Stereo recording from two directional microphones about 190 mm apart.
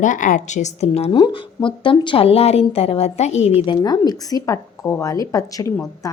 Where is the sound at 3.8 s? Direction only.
20° left (ahead or behind).